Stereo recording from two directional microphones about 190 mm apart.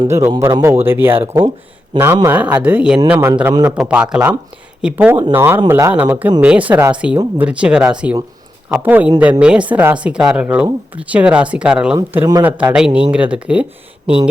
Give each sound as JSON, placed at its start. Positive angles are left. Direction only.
{"t": 0.0, "sound": "speech", "side_deg": -15}
{"t": 11.9, "sound": "speech", "side_deg": -15}